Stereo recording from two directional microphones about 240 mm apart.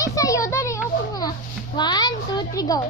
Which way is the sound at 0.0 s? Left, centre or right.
Centre.